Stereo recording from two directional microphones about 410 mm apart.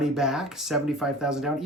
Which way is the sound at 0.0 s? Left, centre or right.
Centre.